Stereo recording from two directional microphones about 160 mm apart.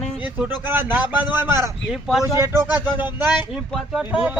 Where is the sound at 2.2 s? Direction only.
15° right (ahead or behind).